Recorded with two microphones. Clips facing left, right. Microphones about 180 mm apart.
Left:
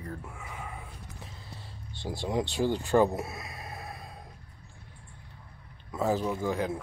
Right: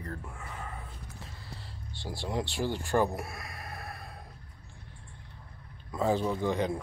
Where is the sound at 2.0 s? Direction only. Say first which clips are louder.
Left 4 dB; 20° left (ahead or behind).